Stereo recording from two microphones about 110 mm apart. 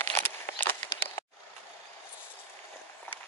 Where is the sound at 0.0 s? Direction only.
20° left (ahead or behind).